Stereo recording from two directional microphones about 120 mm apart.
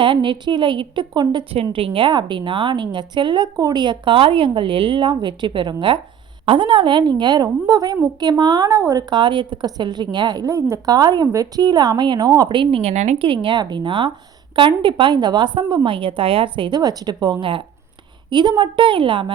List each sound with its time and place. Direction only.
0.0 s a woman's voice: 40° right (ahead or behind); by 13.2 s 65° right (ahead or behind)
13.2 s a woman's voice: 45° right (ahead or behind)